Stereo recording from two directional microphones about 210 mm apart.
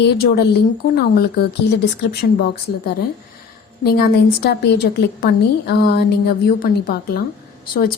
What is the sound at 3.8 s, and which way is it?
A woman's voice, 45° left (ahead or behind).